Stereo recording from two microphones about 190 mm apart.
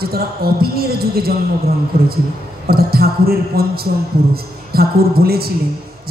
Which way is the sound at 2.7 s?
55° right (ahead or behind).